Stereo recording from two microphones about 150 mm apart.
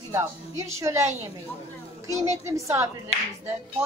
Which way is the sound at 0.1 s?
20° right (ahead or behind).